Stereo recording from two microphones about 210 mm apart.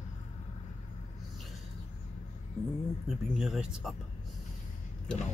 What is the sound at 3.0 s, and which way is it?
Speech, centre (ahead or behind).